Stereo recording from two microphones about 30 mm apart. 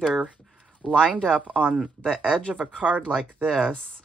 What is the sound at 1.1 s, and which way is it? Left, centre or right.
Speech, left.